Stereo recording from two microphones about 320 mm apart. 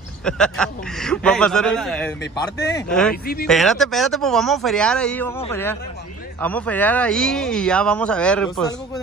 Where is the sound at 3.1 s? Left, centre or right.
Left.